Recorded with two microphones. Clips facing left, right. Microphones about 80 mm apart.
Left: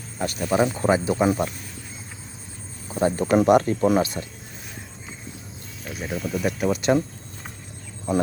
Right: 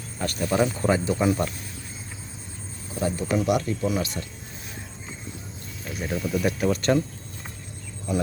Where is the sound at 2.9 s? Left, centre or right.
Left.